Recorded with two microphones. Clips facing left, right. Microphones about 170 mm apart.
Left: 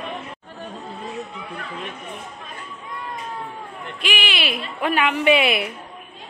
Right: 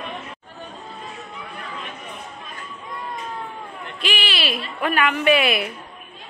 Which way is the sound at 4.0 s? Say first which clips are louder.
Even; 15° left (ahead or behind).